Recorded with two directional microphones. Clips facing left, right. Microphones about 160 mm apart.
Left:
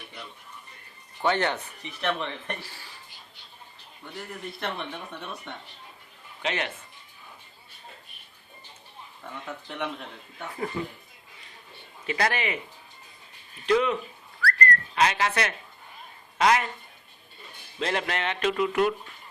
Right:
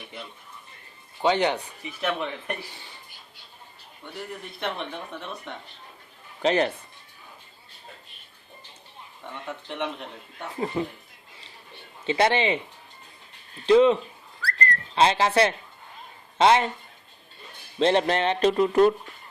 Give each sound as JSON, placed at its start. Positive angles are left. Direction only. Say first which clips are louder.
{"t": 1.2, "sound": "speech", "louder": "right 3 dB", "side_deg": -15}
{"t": 4.6, "sound": "speech", "louder": "right 3 dB", "side_deg": 0}
{"t": 6.4, "sound": "speech", "louder": "right 9 dB", "side_deg": -35}
{"t": 10.8, "sound": "speech", "louder": "right 6 dB", "side_deg": -20}
{"t": 12.0, "sound": "speech", "louder": "right 6 dB", "side_deg": -25}
{"t": 13.7, "sound": "speech", "louder": "right 6 dB", "side_deg": -30}
{"t": 14.4, "sound": "whistling", "louder": "left 3 dB", "side_deg": -25}
{"t": 16.4, "sound": "speech", "louder": "right 4 dB", "side_deg": -30}
{"t": 17.7, "sound": "speech", "louder": "right 8 dB", "side_deg": -30}